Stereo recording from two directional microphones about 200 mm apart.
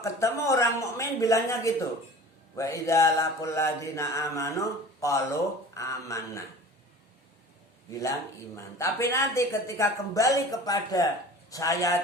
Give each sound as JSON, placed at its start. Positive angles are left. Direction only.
{"t": 0.0, "sound": "mantra", "side_deg": 15}
{"t": 7.9, "sound": "speech", "side_deg": 15}
{"t": 8.5, "sound": "mantra", "side_deg": 15}